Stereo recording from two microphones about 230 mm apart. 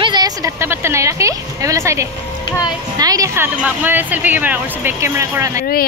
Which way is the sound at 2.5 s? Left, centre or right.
Centre.